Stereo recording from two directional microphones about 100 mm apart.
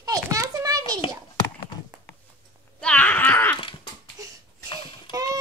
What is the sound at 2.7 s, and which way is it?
Groan, 10° left (ahead or behind).